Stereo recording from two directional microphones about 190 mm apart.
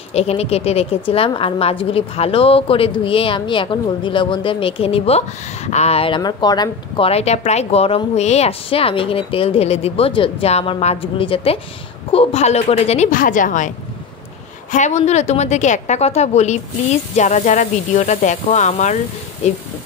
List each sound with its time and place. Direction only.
0.1 s a woman's voice: 35° left (ahead or behind)
14.7 s speech: 40° left (ahead or behind)